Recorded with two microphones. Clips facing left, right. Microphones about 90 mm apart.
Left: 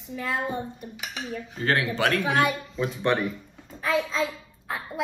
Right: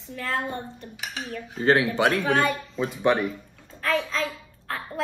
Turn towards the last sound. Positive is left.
turn(degrees=15)  # may be behind; listen again after turning